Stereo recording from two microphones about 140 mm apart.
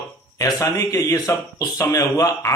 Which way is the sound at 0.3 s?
20° left (ahead or behind).